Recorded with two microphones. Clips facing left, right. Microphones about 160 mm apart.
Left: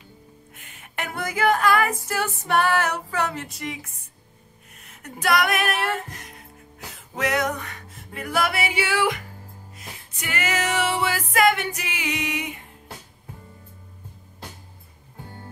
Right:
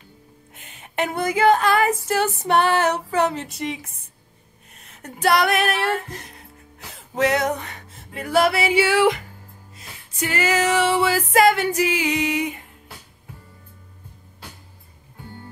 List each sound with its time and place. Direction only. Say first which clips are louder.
0.6 s female singing: right 8 dB; 25° right (ahead or behind)
5.0 s music: right 3 dB; 30° right (ahead or behind)
7.2 s music: right 4 dB; 30° right (ahead or behind)